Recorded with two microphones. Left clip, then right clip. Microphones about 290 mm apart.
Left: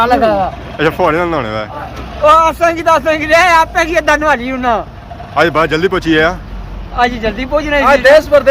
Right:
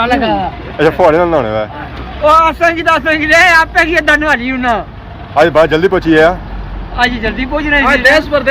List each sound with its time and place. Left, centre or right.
0.0 s speech: left
0.8 s a man's voice: centre